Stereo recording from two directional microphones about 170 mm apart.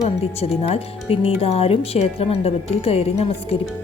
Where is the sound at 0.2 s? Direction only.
35° left (ahead or behind).